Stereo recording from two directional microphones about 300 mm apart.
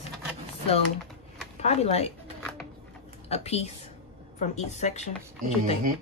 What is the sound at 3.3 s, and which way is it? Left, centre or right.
Speech, left.